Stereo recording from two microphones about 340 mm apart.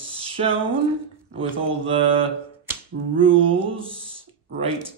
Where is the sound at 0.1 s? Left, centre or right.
Centre.